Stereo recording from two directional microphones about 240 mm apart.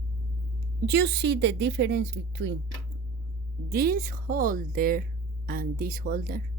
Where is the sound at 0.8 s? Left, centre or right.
Right.